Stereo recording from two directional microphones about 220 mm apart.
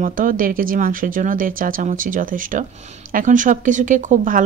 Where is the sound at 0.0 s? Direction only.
40° right (ahead or behind).